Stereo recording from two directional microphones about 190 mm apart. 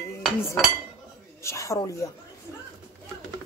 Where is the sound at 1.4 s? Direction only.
15° left (ahead or behind).